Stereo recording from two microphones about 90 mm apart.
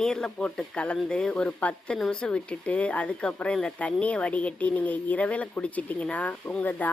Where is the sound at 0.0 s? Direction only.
5° left (ahead or behind).